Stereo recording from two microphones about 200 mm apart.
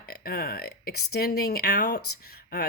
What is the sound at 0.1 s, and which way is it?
Speech, 50° left (ahead or behind).